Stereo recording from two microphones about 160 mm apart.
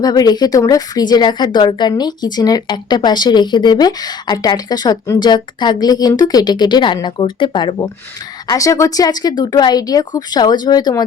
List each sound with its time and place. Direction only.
0.0 s speech: 25° left (ahead or behind)